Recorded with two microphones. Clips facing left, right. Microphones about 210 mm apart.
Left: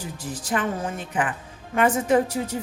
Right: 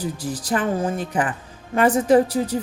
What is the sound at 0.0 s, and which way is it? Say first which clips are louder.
A woman's voice: right 6 dB; 35° right (ahead or behind).